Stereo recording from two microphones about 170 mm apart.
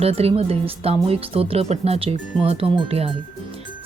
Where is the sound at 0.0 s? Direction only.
35° right (ahead or behind).